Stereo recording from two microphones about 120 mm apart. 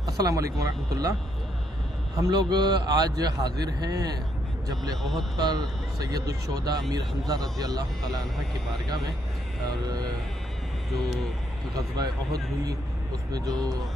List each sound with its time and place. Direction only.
0.0 s speech: 30° right (ahead or behind)
2.2 s speech: 35° right (ahead or behind)
5.4 s speech: 35° right (ahead or behind)
11.7 s speech: 30° right (ahead or behind)